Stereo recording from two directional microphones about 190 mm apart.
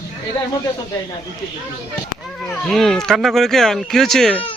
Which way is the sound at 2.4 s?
Centre (ahead or behind).